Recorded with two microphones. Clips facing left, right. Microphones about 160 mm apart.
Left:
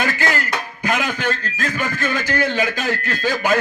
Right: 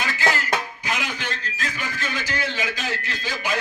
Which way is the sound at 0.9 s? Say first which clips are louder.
Left 10 dB; 55° left (ahead or behind).